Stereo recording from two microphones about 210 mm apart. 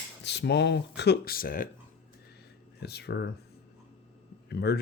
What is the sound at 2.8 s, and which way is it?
Speech, 50° left (ahead or behind).